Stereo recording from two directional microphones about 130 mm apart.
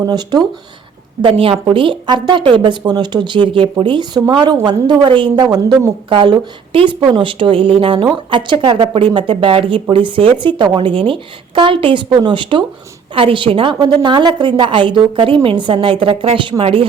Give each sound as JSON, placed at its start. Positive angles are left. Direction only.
{"t": 0.0, "sound": "speech", "side_deg": -30}
{"t": 1.2, "sound": "a woman's voice", "side_deg": -45}